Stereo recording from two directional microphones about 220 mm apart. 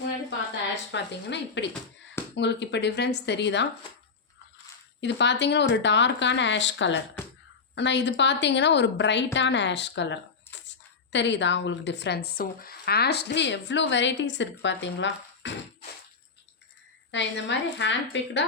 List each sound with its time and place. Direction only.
0.9 s speech: 55° left (ahead or behind)
4.9 s speech: 55° left (ahead or behind)
10.5 s a sound: 55° left (ahead or behind)
11.1 s a woman's voice: 55° left (ahead or behind)
17.1 s a woman's voice: 55° left (ahead or behind)